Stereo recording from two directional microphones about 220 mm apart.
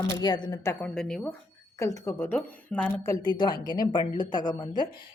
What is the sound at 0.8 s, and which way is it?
Speech, 5° left (ahead or behind).